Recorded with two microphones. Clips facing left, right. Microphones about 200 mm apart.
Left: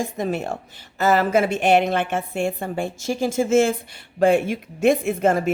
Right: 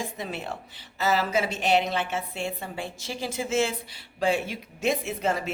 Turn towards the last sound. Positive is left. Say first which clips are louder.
# left 8 dB
turn(degrees=50)  # may be behind; listen again after turning